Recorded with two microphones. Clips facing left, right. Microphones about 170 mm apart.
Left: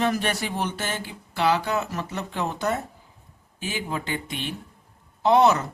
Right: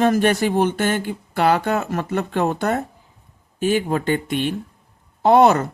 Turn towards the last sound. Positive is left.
turn(degrees=-55)  # may be behind; listen again after turning